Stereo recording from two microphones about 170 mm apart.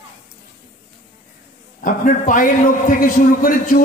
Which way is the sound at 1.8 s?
50° left (ahead or behind).